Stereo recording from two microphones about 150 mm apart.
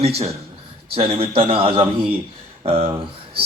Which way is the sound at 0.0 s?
45° right (ahead or behind).